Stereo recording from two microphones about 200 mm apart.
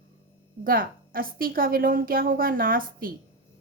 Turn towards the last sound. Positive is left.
turn(degrees=-45)  # may be behind; listen again after turning